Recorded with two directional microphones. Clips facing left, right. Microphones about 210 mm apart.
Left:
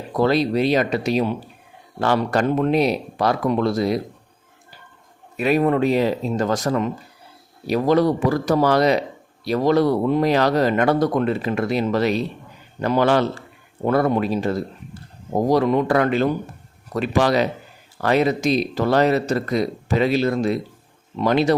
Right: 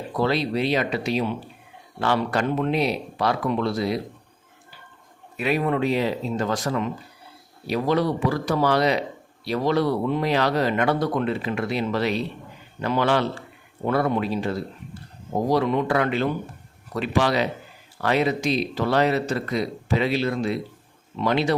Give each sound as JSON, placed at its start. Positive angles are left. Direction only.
{"t": 0.1, "sound": "speech", "side_deg": 45}
{"t": 5.4, "sound": "speech", "side_deg": 45}